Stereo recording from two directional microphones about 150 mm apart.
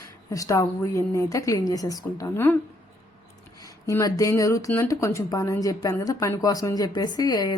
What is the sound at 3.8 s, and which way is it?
A woman's voice, 25° left (ahead or behind).